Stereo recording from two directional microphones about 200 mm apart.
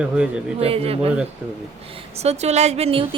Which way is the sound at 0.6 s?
30° right (ahead or behind).